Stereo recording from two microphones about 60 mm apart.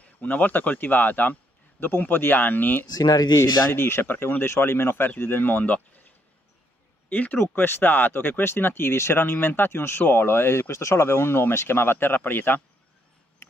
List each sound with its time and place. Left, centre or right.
0.0 s a man's voice: left
3.3 s speech: left
7.1 s speech: left
13.4 s a sound: left